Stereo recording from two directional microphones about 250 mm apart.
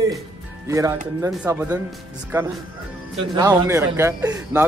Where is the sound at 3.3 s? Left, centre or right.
Centre.